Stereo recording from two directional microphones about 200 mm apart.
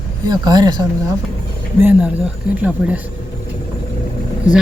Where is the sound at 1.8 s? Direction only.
10° right (ahead or behind).